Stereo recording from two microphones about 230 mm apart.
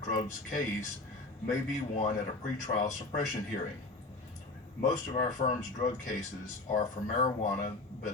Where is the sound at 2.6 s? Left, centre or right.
Left.